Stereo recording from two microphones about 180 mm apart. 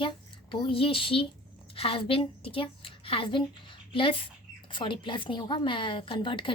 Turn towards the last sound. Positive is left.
turn(degrees=25)  # may be behind; listen again after turning